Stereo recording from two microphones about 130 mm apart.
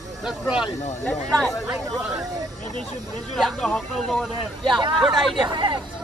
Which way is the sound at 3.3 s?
Centre (ahead or behind).